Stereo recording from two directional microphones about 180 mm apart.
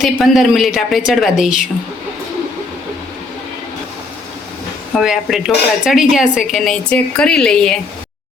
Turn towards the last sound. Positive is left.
turn(degrees=5)  # may be behind; listen again after turning